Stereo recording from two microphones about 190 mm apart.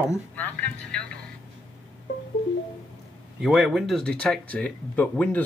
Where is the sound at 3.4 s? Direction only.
Centre (ahead or behind).